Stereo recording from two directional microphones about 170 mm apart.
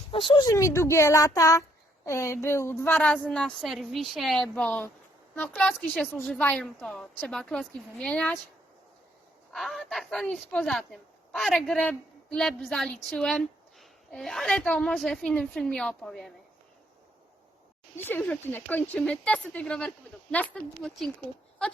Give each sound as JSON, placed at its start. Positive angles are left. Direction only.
{"t": 0.1, "sound": "a woman's voice", "side_deg": 30}
{"t": 9.5, "sound": "a woman's voice", "side_deg": 0}
{"t": 17.9, "sound": "speech", "side_deg": 10}